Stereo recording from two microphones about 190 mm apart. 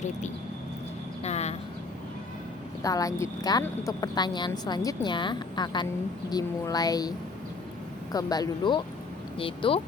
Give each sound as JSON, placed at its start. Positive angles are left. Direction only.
{"t": 1.2, "sound": "a sound", "side_deg": 35}
{"t": 2.8, "sound": "a woman's voice", "side_deg": 20}
{"t": 8.1, "sound": "a woman's voice", "side_deg": 20}